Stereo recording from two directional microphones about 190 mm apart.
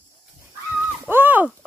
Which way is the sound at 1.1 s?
10° right (ahead or behind).